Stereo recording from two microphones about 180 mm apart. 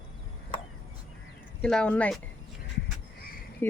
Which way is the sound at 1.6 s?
5° left (ahead or behind).